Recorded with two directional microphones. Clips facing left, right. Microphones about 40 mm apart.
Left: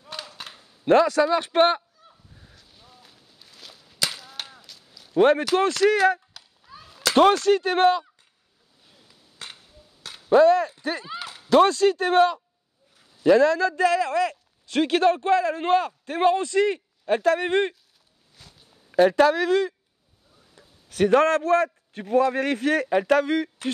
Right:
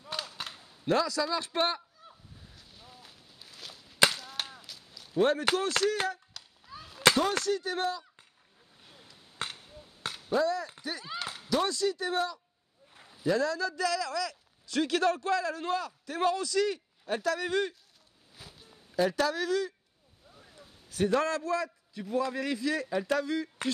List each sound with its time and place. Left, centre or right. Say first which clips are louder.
0.0 s a sound: even; centre
0.8 s a man's voice: left 10 dB; left
2.0 s fowl: even; centre
2.5 s walk: right 1 dB; centre
4.1 s chop: even; centre
5.1 s a man's voice: left 8 dB; left
6.3 s a sound: left 1 dB; centre
7.4 s speech: left 12 dB; left
9.4 s a sound: right 3 dB; right
10.3 s a man's voice: left 13 dB; left
18.3 s a sound: right 1 dB; centre
18.9 s a man's voice: left 11 dB; left